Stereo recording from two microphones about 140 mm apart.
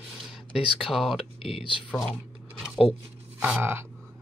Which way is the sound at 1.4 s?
40° left (ahead or behind).